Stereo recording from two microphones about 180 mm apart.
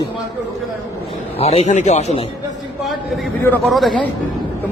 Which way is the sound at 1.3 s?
35° left (ahead or behind).